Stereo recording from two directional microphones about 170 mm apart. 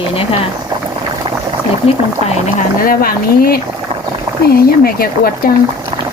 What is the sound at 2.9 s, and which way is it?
Speech, 60° left (ahead or behind).